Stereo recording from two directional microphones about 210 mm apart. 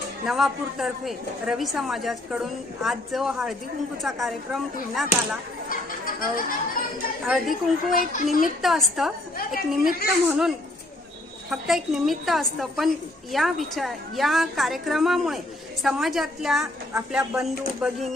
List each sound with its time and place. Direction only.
0.3 s a woman's voice: centre (ahead or behind)
6.1 s speech: 40° left (ahead or behind)
7.3 s a woman's voice: centre (ahead or behind)
7.9 s speech: 40° left (ahead or behind)
8.6 s a woman's voice: centre (ahead or behind)
11.5 s a woman's voice: centre (ahead or behind)